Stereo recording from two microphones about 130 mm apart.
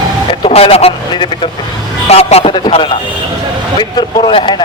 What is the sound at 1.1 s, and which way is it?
Speech, 40° left (ahead or behind).